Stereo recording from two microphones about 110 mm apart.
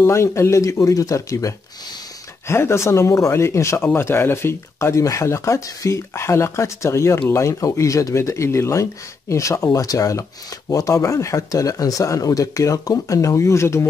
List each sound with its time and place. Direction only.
0.0 s speech: 25° left (ahead or behind)